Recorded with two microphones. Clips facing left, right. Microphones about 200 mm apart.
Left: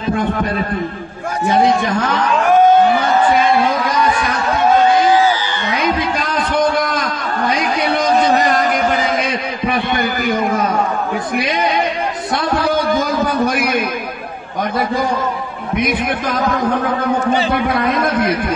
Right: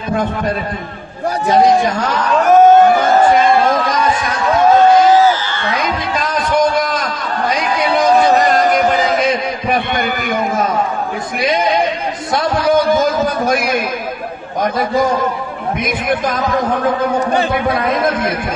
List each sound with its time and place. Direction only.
2.4 s a sound: 45° right (ahead or behind)
6.1 s music: 55° left (ahead or behind)
9.9 s a man's voice: 55° right (ahead or behind)
17.3 s a man's voice: 50° right (ahead or behind)